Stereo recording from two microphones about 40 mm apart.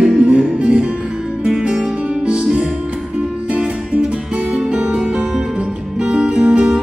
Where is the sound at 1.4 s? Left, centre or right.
Centre.